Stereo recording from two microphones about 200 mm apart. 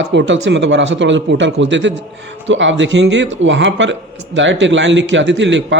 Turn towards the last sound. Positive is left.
turn(degrees=-65)  # may be behind; listen again after turning